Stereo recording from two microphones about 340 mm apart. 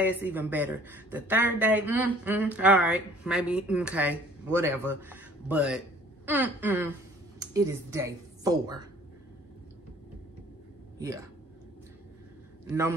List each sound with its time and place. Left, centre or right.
0.2 s speech: centre
12.6 s a man's voice: centre